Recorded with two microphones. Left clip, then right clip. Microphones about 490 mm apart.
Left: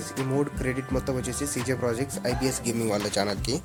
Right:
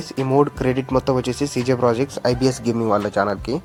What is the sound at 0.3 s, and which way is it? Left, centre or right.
Speech, left.